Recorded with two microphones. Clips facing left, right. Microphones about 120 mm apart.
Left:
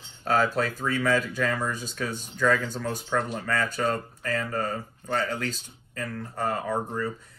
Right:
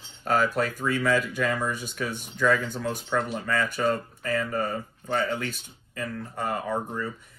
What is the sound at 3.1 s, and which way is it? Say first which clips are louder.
Speech: even; 20° right (ahead or behind).